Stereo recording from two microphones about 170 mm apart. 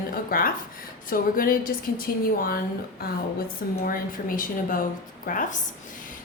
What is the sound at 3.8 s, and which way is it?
A woman's voice, 55° left (ahead or behind).